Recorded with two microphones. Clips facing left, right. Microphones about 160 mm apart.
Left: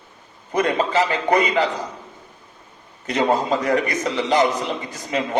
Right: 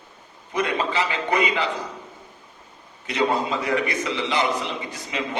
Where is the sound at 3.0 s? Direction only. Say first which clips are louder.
Left 3 dB; 45° left (ahead or behind).